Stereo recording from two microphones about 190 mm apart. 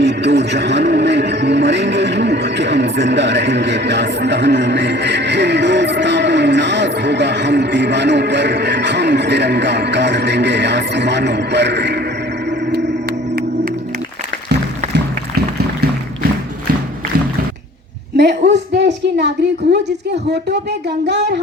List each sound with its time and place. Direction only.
0.0 s a man's voice: 65° right (ahead or behind)
12.5 s music: 65° right (ahead or behind)
18.2 s a sound: 65° right (ahead or behind)
20.2 s speech: 60° right (ahead or behind)